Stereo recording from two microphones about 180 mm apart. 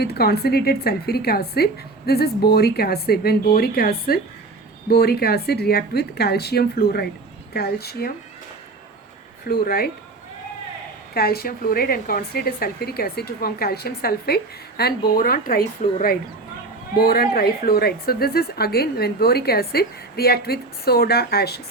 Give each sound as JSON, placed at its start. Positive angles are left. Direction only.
{"t": 0.0, "sound": "a woman's voice", "side_deg": 60}
{"t": 9.4, "sound": "a woman's voice", "side_deg": 55}
{"t": 11.1, "sound": "a woman's voice", "side_deg": 60}
{"t": 17.0, "sound": "a woman's voice", "side_deg": 55}